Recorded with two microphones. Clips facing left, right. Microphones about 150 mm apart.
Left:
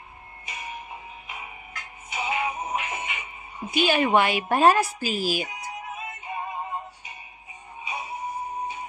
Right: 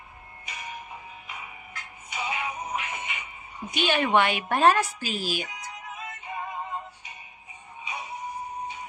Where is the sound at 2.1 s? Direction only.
25° left (ahead or behind).